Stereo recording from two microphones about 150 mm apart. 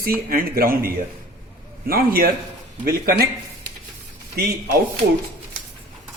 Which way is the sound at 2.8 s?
90° right.